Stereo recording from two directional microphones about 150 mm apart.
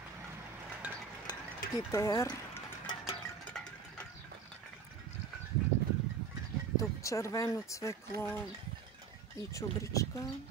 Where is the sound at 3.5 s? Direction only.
5° left (ahead or behind).